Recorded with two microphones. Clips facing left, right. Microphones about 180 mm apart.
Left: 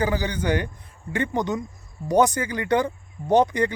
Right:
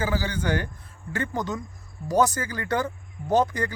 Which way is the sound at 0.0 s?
15° left (ahead or behind).